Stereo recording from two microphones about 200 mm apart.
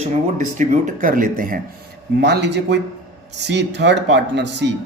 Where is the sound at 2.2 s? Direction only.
60° right (ahead or behind).